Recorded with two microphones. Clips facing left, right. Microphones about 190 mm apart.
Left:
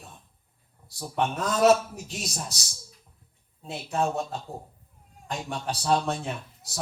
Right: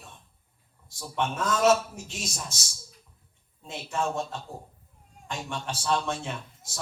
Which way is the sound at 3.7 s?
35° left (ahead or behind).